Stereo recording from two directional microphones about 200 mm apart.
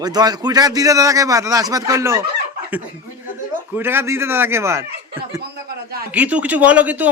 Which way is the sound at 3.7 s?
10° right (ahead or behind).